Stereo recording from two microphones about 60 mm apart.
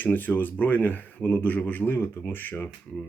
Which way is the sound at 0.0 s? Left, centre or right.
Left.